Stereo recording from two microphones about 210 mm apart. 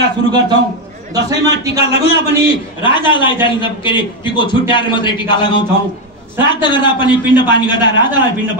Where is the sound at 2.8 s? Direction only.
20° left (ahead or behind).